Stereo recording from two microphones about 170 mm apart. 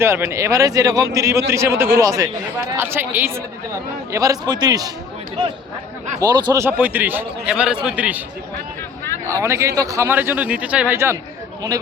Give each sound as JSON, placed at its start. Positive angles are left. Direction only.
{"t": 0.0, "sound": "a man's voice", "side_deg": -15}
{"t": 6.1, "sound": "a man's voice", "side_deg": -25}
{"t": 9.4, "sound": "a man's voice", "side_deg": -15}